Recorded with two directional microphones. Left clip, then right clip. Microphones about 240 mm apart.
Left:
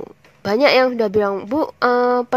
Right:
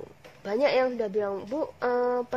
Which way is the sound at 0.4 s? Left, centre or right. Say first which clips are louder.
Left 10 dB; left.